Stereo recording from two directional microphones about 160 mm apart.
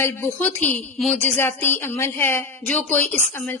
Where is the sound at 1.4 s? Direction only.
15° left (ahead or behind).